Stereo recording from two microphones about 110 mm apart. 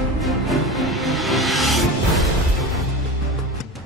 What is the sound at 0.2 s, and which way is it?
Music, centre (ahead or behind).